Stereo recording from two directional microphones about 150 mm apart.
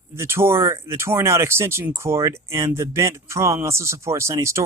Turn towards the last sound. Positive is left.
turn(degrees=-20)  # may be behind; listen again after turning